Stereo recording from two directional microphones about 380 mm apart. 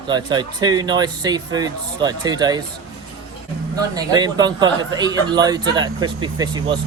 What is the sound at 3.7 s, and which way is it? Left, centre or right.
Speech, centre.